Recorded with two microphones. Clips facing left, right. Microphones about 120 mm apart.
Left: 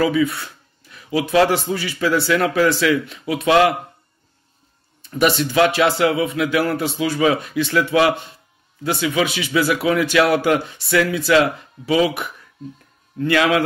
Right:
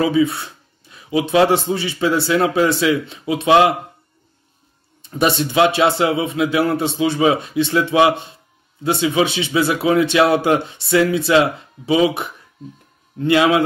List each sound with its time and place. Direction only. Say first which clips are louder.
0.0 s a man's voice: right 2 dB; 25° right (ahead or behind)
5.1 s a man's voice: even; 25° right (ahead or behind)